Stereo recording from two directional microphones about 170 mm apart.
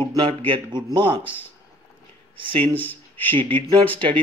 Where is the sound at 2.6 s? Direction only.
10° left (ahead or behind).